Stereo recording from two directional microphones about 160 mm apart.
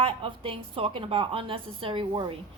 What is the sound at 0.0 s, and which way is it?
A woman's voice, 35° right (ahead or behind).